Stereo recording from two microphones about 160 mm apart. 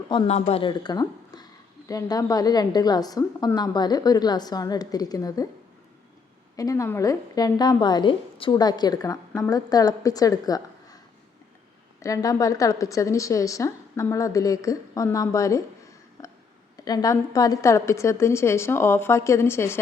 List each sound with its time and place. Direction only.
0.3 s a woman's voice: 45° left (ahead or behind); by 5.5 s 20° left (ahead or behind)
6.6 s a woman's voice: 20° left (ahead or behind)
12.0 s a woman's voice: 20° left (ahead or behind)
16.7 s a woman's voice: 25° left (ahead or behind)